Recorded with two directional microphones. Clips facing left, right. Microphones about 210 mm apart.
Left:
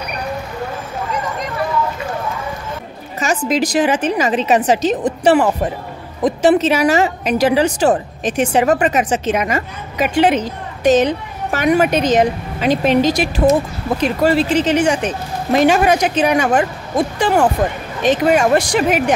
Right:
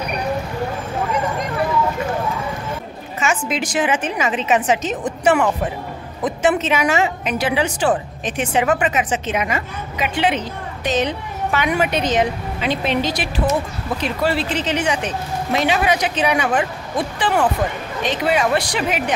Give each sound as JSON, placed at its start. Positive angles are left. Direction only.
{"t": 3.2, "sound": "a woman's voice", "side_deg": 40}